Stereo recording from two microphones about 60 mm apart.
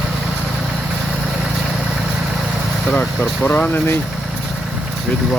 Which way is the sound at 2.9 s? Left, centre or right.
Left.